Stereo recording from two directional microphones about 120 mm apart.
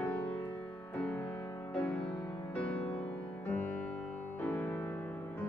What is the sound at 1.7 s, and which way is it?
Music, 10° left (ahead or behind).